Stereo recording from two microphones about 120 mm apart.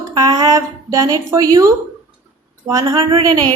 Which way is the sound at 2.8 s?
45° right (ahead or behind).